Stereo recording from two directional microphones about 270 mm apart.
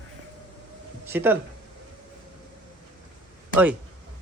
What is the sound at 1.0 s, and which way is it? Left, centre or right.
Speech, centre.